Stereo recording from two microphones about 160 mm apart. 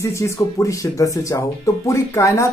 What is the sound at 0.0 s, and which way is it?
Speech, 20° left (ahead or behind).